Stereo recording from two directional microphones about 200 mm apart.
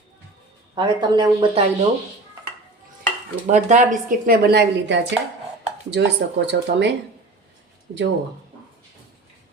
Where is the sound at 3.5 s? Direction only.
40° right (ahead or behind); by 6.9 s 60° right (ahead or behind).